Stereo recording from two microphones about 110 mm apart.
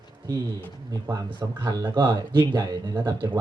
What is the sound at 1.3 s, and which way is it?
Speech, 45° right (ahead or behind).